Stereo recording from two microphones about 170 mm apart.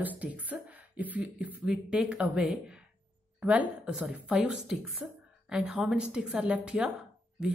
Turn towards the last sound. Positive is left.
turn(degrees=-5)  # may be behind; listen again after turning